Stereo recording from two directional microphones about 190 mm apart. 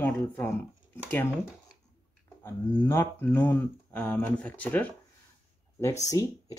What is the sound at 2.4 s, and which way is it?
Speech, 10° left (ahead or behind).